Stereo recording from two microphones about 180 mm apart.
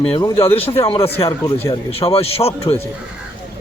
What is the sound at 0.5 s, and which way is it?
A man's voice, 30° left (ahead or behind).